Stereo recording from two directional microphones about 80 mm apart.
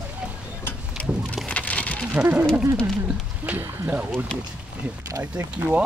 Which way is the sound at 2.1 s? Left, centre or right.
Centre.